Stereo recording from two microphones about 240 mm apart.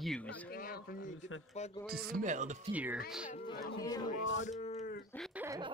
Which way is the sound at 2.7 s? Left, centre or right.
Centre.